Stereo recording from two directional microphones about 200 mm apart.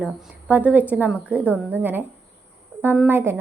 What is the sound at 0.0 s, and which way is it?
A woman's voice, 5° right (ahead or behind).